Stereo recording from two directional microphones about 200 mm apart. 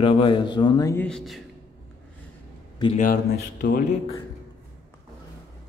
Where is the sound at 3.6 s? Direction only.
60° left (ahead or behind).